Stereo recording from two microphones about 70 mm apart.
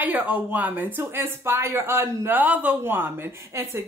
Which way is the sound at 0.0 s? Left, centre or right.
Right.